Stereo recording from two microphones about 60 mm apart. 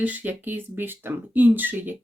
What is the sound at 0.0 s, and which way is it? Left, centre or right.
Speech, right.